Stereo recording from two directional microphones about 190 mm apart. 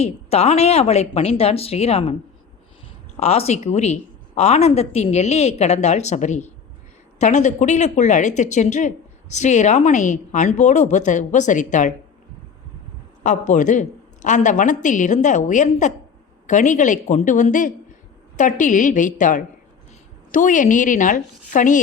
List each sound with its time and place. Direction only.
0.0 s a woman's voice: 35° left (ahead or behind)
3.2 s a woman's voice: 35° left (ahead or behind)
13.2 s a woman's voice: 40° left (ahead or behind)